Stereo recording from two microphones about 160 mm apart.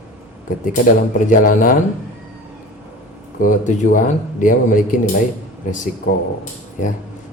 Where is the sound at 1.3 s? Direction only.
55° left (ahead or behind).